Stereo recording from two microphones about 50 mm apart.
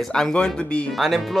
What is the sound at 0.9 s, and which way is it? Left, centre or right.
Speech, centre.